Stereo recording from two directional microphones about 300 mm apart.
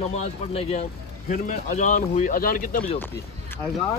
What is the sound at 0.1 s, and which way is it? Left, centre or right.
Speech, left.